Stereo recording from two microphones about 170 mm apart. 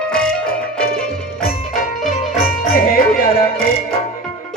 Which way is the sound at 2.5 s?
60° left (ahead or behind).